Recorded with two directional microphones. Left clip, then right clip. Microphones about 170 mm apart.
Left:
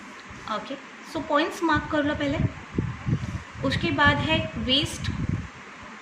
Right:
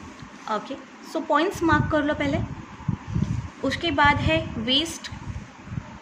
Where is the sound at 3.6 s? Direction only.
45° right (ahead or behind).